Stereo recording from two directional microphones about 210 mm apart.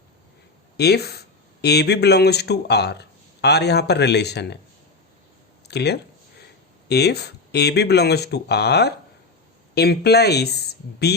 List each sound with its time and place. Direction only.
0.8 s speech: 50° left (ahead or behind)
5.6 s speech: 50° left (ahead or behind)